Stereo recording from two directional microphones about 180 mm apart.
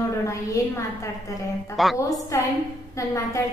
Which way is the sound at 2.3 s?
15° left (ahead or behind).